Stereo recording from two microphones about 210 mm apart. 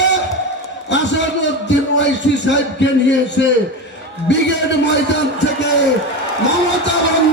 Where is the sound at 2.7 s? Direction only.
60° left (ahead or behind).